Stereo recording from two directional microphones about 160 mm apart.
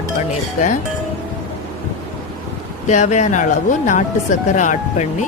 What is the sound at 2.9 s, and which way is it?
Speech, 50° left (ahead or behind).